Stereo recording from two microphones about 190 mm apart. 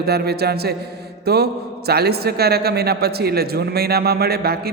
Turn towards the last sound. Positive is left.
turn(degrees=-55)  # may be behind; listen again after turning